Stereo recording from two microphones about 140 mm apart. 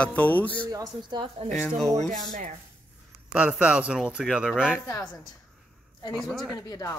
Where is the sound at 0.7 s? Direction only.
25° right (ahead or behind).